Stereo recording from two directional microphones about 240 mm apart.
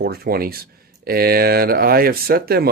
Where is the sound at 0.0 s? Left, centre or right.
Right.